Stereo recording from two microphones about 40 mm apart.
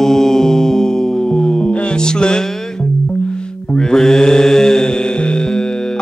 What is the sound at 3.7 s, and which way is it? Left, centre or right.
Mantra, centre.